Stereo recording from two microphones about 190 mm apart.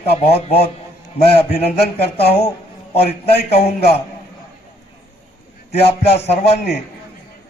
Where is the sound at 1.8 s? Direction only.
60° left (ahead or behind).